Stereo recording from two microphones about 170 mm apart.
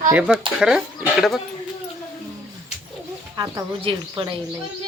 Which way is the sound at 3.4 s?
30° right (ahead or behind).